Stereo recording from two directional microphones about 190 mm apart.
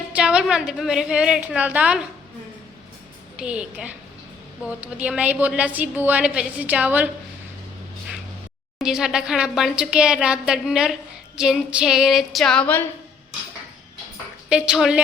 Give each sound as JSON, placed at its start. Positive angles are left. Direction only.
{"t": 0.1, "sound": "a woman's voice", "side_deg": -5}
{"t": 3.3, "sound": "a woman's voice", "side_deg": -5}
{"t": 8.8, "sound": "a woman's voice", "side_deg": -5}
{"t": 14.5, "sound": "a woman's voice", "side_deg": -5}